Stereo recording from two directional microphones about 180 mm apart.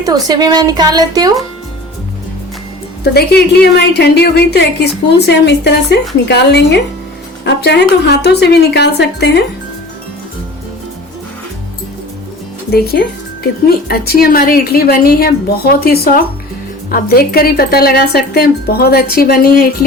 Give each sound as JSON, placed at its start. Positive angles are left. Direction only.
{"t": 0.0, "sound": "a woman's voice", "side_deg": -20}
{"t": 3.0, "sound": "a woman's voice", "side_deg": 65}
{"t": 12.7, "sound": "speech", "side_deg": 55}